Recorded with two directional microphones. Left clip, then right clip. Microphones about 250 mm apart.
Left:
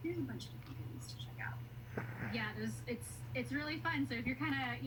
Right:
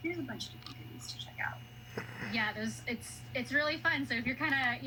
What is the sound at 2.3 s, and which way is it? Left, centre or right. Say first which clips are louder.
A woman's voice: right 9 dB; right.